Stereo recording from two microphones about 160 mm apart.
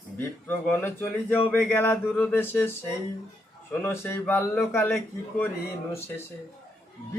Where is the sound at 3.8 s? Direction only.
15° left (ahead or behind).